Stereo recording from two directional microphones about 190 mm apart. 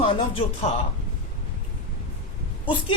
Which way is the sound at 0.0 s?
30° left (ahead or behind).